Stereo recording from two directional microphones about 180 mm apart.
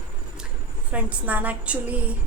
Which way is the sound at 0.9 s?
10° right (ahead or behind).